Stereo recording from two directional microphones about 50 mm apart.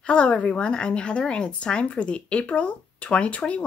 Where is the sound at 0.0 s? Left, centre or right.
Left.